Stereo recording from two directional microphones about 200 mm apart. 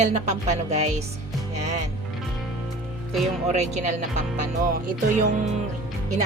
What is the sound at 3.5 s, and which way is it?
Speech, 35° right (ahead or behind).